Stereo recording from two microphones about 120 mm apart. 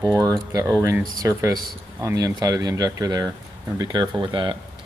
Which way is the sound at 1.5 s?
30° right (ahead or behind).